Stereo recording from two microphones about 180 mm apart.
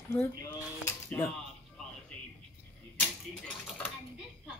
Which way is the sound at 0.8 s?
10° left (ahead or behind).